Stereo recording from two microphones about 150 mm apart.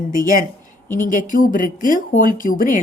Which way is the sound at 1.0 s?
60° left (ahead or behind).